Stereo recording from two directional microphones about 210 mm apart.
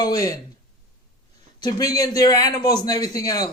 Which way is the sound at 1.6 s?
20° left (ahead or behind).